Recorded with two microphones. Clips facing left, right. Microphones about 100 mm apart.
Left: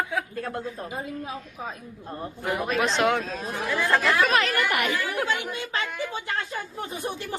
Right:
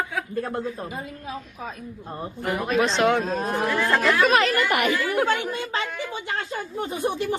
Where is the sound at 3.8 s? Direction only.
Centre (ahead or behind).